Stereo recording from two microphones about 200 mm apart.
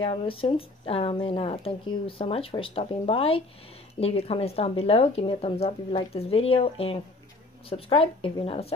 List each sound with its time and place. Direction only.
0.0 s speech: 25° left (ahead or behind)